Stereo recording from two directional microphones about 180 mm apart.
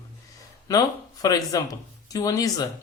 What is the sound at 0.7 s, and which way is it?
Speech, 20° left (ahead or behind).